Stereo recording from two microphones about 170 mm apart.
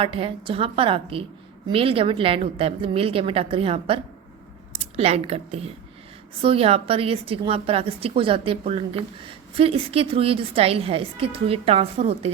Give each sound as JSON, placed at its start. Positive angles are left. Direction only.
{"t": 0.0, "sound": "a woman's voice", "side_deg": -30}